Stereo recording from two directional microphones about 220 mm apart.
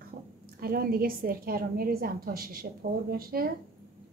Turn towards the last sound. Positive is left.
turn(degrees=-45)  # may be behind; listen again after turning